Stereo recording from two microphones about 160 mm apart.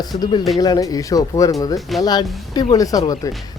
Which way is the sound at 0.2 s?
30° left (ahead or behind).